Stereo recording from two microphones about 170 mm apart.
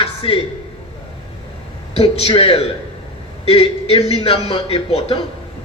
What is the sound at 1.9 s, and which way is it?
A man's voice, 35° left (ahead or behind).